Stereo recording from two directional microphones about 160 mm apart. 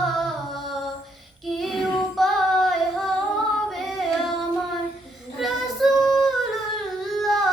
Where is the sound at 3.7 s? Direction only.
Centre (ahead or behind).